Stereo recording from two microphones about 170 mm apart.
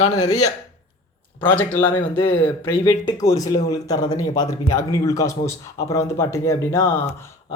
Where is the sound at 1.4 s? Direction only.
10° left (ahead or behind).